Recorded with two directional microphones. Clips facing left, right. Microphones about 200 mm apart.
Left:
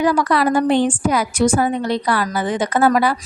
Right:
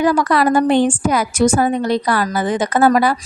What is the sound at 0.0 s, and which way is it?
A woman's voice, 45° right (ahead or behind).